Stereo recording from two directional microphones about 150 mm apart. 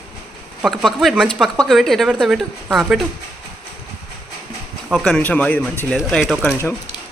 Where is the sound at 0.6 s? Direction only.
Centre (ahead or behind).